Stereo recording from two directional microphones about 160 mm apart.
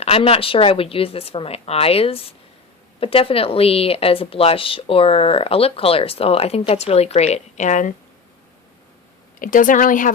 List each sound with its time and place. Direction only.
0.0 s a woman's voice: 35° left (ahead or behind)
9.4 s speech: 60° left (ahead or behind)